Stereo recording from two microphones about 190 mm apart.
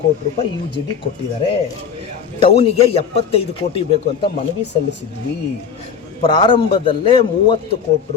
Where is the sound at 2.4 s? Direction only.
30° left (ahead or behind).